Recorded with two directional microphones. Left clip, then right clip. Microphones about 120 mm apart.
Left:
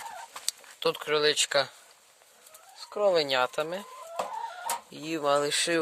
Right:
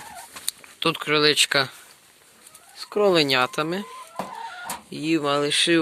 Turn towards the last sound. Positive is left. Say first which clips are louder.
# right 5 dB
turn(degrees=90)